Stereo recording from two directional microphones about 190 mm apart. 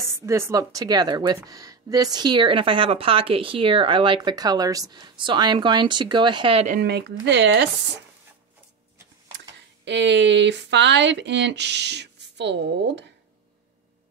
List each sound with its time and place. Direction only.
0.0 s speech: 15° right (ahead or behind)
6.7 s speech: 60° right (ahead or behind)
9.8 s speech: 70° right (ahead or behind)